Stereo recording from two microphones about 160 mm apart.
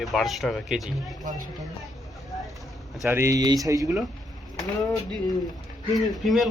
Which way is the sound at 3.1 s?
15° right (ahead or behind).